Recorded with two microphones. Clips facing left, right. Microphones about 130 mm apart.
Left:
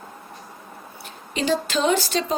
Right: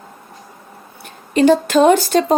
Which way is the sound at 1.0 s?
50° right (ahead or behind).